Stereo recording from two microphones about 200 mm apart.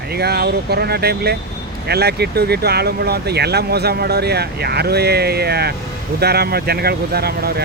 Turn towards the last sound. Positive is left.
turn(degrees=-50)  # may be behind; listen again after turning